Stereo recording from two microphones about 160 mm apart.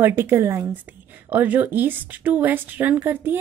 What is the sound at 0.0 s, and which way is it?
A woman's voice, 15° right (ahead or behind).